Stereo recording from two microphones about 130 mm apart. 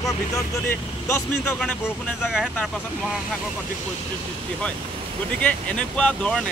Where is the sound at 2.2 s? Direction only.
Centre (ahead or behind).